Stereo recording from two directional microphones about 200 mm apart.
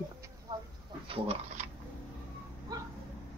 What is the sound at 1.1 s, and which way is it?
Speech, 30° right (ahead or behind).